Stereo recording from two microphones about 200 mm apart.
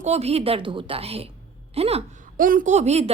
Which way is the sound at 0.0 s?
30° right (ahead or behind).